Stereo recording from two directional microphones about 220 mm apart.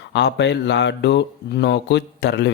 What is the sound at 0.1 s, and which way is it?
Speech, 50° left (ahead or behind).